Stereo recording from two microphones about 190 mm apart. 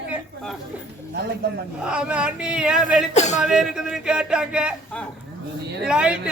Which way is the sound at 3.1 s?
35° left (ahead or behind).